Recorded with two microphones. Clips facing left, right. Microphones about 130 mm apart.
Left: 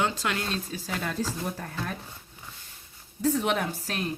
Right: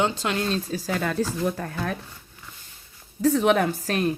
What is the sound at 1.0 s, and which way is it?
Speech, 85° right.